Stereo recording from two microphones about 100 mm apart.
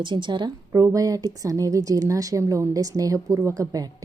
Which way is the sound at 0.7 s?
35° right (ahead or behind).